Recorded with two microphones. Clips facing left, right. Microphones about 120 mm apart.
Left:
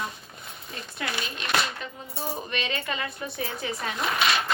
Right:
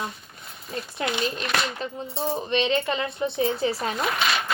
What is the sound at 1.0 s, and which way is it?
Speech, 20° right (ahead or behind).